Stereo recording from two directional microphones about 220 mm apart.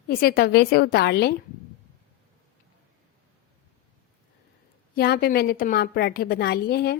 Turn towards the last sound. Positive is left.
turn(degrees=45)  # may be behind; listen again after turning